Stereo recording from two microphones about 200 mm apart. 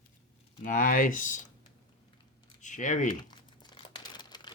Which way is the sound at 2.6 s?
40° left (ahead or behind).